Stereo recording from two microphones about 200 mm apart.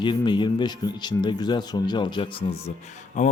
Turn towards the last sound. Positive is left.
turn(degrees=40)  # may be behind; listen again after turning